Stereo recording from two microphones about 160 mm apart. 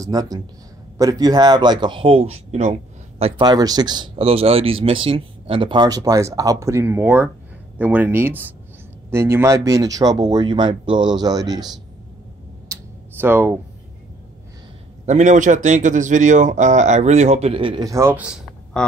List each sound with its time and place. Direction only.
0.0 s speech: 25° right (ahead or behind)
3.4 s speech: 25° right (ahead or behind)
13.2 s speech: 15° right (ahead or behind)
15.0 s a man's voice: 50° right (ahead or behind); by 17.8 s 30° right (ahead or behind)
17.8 s speech: 20° right (ahead or behind)
18.1 s speech: 5° right (ahead or behind)
18.8 s quack: 5° left (ahead or behind)